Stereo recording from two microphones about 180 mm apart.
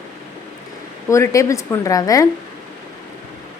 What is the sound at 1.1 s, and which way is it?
A woman's voice, 15° left (ahead or behind).